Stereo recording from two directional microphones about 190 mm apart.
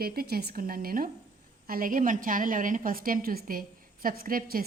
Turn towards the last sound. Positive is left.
turn(degrees=-50)  # may be behind; listen again after turning